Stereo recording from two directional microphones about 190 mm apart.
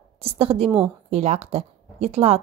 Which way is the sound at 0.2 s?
30° right (ahead or behind).